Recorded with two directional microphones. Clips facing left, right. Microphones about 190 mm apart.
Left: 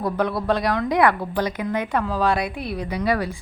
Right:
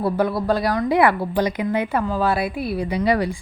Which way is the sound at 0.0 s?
5° right (ahead or behind).